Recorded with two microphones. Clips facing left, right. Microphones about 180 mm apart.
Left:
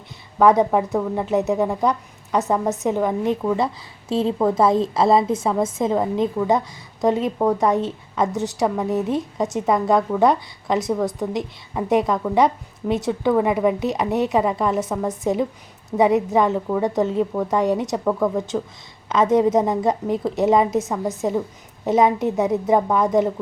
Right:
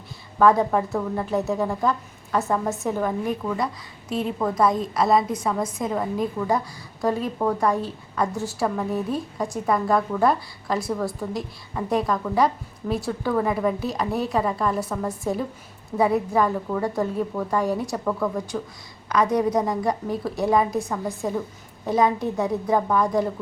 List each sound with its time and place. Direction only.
0.3 s a woman's voice: 20° left (ahead or behind)